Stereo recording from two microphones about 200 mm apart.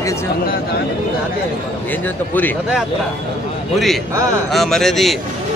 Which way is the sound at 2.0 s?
10° left (ahead or behind).